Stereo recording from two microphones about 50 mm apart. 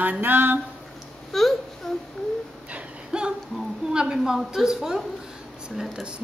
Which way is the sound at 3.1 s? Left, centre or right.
Centre.